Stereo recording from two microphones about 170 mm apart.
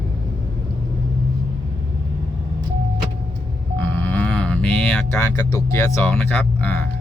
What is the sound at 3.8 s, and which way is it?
Cattle, 10° left (ahead or behind).